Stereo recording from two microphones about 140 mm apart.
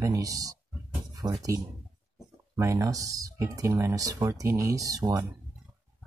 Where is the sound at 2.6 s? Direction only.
20° right (ahead or behind).